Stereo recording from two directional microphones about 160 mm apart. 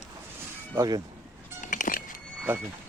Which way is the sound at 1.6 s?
55° left (ahead or behind).